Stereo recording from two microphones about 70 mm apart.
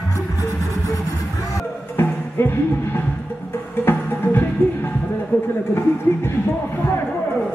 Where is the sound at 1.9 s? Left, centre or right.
Left.